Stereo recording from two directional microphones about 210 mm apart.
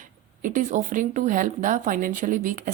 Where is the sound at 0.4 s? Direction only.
35° right (ahead or behind).